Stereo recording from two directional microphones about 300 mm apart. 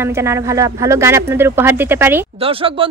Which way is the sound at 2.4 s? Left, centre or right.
Centre.